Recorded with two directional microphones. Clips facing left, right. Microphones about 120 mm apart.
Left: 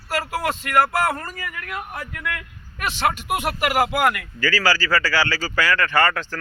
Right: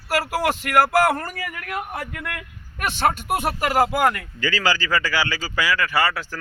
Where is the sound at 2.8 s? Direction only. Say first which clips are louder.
Right 1 dB; 50° right (ahead or behind).